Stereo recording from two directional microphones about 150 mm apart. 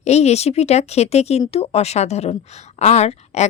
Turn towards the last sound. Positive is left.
turn(degrees=45)  # may be behind; listen again after turning